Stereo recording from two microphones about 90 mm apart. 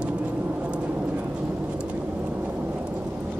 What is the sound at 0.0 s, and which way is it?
Vehicle, 10° right (ahead or behind).